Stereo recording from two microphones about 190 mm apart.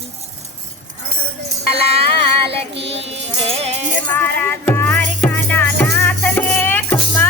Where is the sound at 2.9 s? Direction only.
35° right (ahead or behind).